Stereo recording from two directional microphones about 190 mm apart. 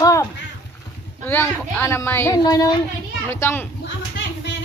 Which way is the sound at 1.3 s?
10° left (ahead or behind).